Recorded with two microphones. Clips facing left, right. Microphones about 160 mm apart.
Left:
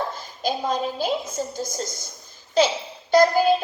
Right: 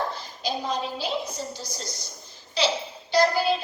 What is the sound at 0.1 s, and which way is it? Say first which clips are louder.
A woman's voice: left 4 dB; 50° left (ahead or behind).